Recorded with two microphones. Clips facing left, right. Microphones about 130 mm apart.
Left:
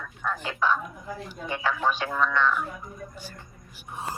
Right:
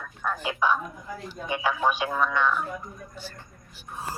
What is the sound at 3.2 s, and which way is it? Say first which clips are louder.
Speech: right 1 dB; 10° left (ahead or behind).